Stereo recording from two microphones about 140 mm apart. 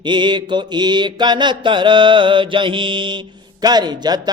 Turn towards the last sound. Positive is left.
turn(degrees=-30)  # may be behind; listen again after turning